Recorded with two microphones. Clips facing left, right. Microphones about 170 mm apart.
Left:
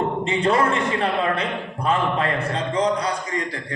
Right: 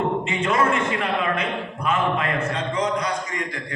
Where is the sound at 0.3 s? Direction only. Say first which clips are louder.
Left 5 dB; 35° left (ahead or behind).